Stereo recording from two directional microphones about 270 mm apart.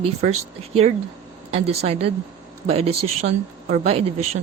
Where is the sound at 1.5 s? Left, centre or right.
Right.